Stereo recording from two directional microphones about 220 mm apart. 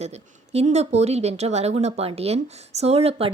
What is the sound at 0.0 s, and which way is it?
Speech, 30° right (ahead or behind).